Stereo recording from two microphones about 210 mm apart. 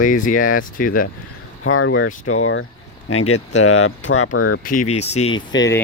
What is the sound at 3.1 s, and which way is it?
Speech, 90° left.